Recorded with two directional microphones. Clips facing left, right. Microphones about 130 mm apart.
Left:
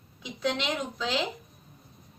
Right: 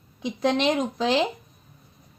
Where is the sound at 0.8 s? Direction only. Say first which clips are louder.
Right 8 dB; 70° right (ahead or behind).